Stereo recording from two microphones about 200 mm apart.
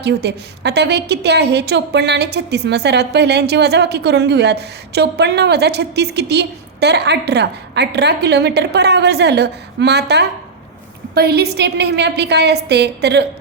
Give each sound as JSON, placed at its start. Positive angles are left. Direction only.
{"t": 0.0, "sound": "a woman's voice", "side_deg": -55}